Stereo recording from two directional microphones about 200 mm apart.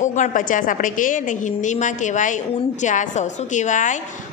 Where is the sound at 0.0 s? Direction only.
40° left (ahead or behind).